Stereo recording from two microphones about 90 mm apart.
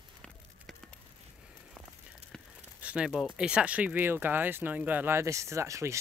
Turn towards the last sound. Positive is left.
turn(degrees=-35)  # may be behind; listen again after turning